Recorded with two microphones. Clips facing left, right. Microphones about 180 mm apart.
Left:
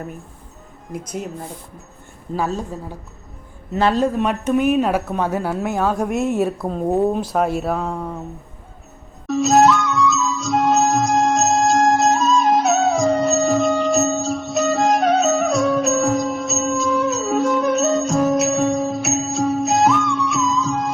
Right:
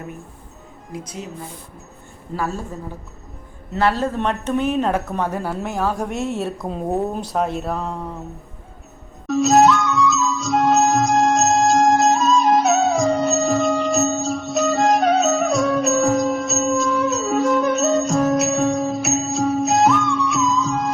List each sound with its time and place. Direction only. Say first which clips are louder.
0.9 s speech: left 4 dB; 55° left (ahead or behind)
2.3 s a woman's voice: left 3 dB; 20° left (ahead or behind)
3.8 s speech: left 2 dB; 20° left (ahead or behind)
6.7 s speech: left 3 dB; centre (ahead or behind)
9.2 s music: even; centre (ahead or behind)